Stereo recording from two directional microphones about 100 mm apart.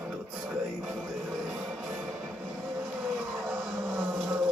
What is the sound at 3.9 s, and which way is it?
Vehicle, 15° right (ahead or behind).